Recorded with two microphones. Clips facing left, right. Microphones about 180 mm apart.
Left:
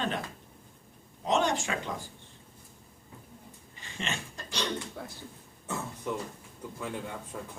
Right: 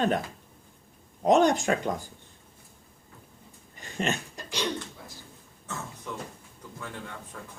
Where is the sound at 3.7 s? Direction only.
45° right (ahead or behind).